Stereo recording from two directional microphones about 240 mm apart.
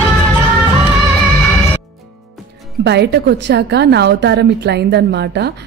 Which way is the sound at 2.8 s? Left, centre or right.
Right.